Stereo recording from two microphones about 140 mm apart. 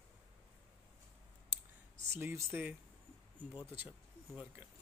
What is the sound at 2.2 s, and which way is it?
Speech, 15° right (ahead or behind).